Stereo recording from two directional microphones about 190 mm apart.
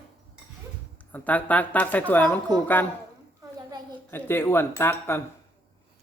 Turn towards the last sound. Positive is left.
turn(degrees=10)  # may be behind; listen again after turning